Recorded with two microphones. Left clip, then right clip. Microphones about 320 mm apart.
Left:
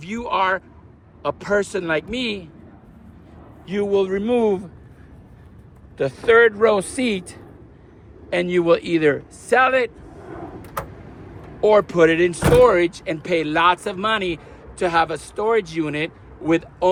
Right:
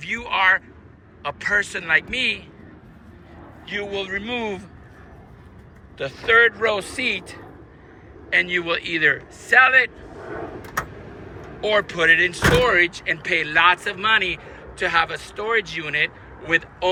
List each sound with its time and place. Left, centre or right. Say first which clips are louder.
0.0 s a man's voice: right 1 dB; centre
3.7 s speech: left 6 dB; left
6.0 s speech: left 2 dB; left
11.6 s speech: left 4 dB; left